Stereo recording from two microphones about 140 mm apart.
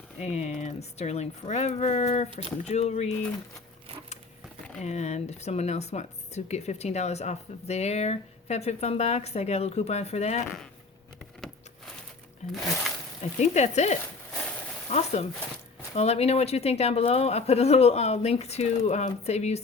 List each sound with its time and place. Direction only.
0.2 s speech: 55° left (ahead or behind)
4.8 s speech: 55° left (ahead or behind)
12.5 s speech: centre (ahead or behind)
13.4 s speech: 55° left (ahead or behind)